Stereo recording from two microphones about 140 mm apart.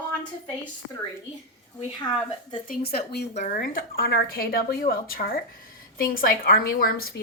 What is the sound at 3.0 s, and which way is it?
Speech, 55° left (ahead or behind).